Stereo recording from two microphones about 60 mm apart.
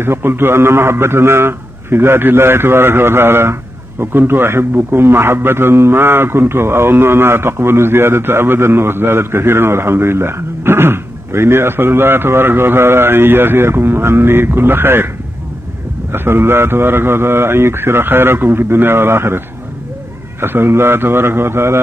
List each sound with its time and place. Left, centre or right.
0.0 s a man's voice: right
16.1 s a man's voice: right